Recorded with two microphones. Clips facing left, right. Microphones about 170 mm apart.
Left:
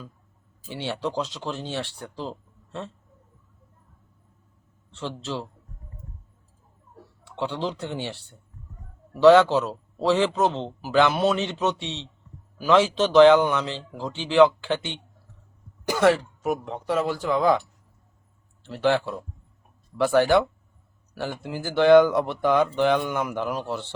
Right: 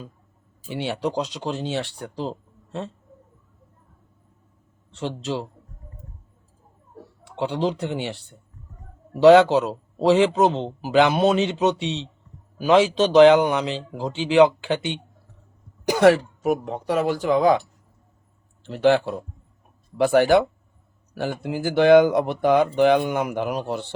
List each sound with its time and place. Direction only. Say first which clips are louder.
0.7 s speech: right 3 dB; 15° right (ahead or behind)
2.1 s a sound: right 5 dB; 20° right (ahead or behind)
4.9 s speech: right 4 dB; 15° right (ahead or behind)
7.3 s speech: right 5 dB; 15° right (ahead or behind)
18.6 s speech: right 4 dB; 20° right (ahead or behind)
20.1 s speech: right 2 dB; 15° right (ahead or behind)